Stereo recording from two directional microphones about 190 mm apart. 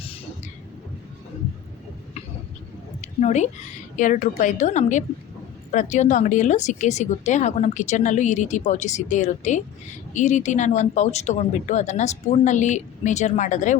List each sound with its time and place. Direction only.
3.0 s a woman's voice: 35° left (ahead or behind)